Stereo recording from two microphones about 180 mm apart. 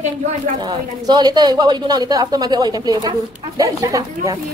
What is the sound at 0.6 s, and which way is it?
A woman's voice, 20° right (ahead or behind).